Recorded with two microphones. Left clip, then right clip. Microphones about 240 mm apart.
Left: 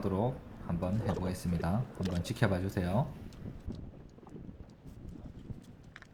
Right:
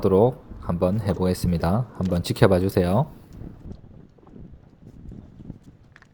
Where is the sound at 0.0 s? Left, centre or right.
Right.